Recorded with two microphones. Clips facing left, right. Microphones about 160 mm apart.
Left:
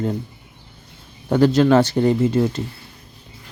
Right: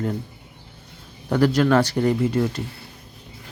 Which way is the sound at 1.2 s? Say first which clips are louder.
Left 4 dB; 25° left (ahead or behind).